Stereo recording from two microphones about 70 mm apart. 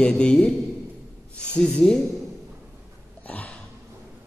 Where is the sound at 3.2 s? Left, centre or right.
Left.